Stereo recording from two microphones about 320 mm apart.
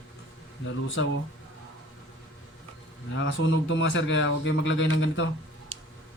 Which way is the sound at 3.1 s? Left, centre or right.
Left.